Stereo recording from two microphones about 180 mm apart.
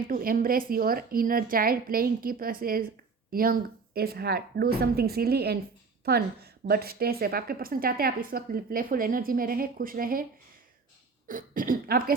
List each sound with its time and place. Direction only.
0.1 s a woman's voice: 50° right (ahead or behind)
11.3 s a woman's voice: 50° right (ahead or behind)